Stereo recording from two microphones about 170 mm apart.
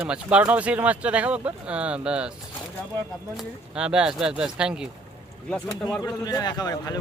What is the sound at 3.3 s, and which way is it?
Speech, 5° right (ahead or behind).